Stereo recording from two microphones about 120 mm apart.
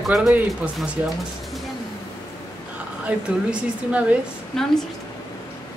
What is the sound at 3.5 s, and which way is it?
Speech, 10° right (ahead or behind).